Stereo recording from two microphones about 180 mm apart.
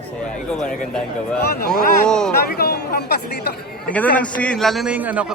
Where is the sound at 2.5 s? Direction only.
65° left (ahead or behind).